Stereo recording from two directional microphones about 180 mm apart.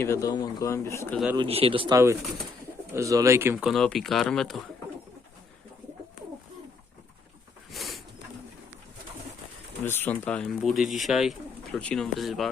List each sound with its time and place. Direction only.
0.0 s speech: 15° left (ahead or behind)
1.4 s speech: 30° right (ahead or behind)
2.9 s speech: 15° right (ahead or behind)
3.7 s speech: centre (ahead or behind)
7.7 s bird: centre (ahead or behind)
9.8 s speech: 10° left (ahead or behind)